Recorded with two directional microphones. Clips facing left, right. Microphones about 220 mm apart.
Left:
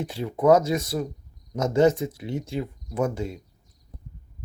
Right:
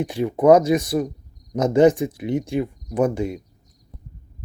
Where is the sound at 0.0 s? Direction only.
15° right (ahead or behind).